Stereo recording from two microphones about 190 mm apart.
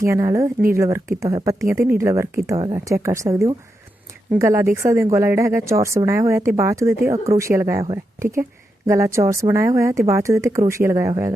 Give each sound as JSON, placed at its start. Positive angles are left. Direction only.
{"t": 0.0, "sound": "speech", "side_deg": -15}